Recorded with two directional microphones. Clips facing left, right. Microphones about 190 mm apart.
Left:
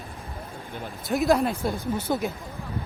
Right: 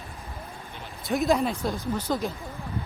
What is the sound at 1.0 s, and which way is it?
A woman's voice, centre (ahead or behind).